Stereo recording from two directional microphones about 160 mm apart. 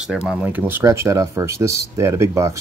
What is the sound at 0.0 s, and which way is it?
Speech, 5° right (ahead or behind).